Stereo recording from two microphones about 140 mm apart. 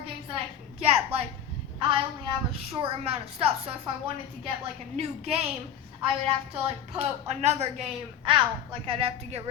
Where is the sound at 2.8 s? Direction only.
45° right (ahead or behind).